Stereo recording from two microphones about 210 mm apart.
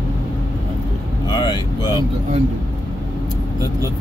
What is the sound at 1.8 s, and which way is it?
Speech, 15° right (ahead or behind).